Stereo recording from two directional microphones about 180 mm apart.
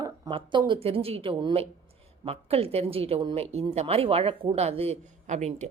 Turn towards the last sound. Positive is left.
turn(degrees=-40)  # may be behind; listen again after turning